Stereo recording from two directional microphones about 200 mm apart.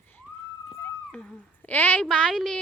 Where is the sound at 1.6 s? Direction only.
10° left (ahead or behind).